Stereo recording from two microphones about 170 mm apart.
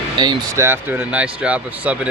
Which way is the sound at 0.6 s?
10° right (ahead or behind).